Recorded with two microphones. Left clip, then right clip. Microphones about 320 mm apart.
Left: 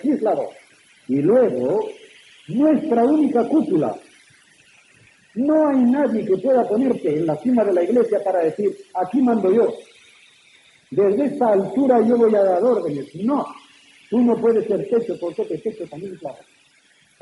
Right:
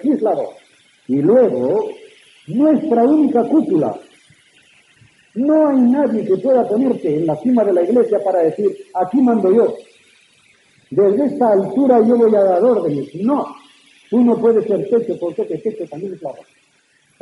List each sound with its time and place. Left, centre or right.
0.1 s a man's voice: right
5.5 s a man's voice: right
11.0 s a man's voice: right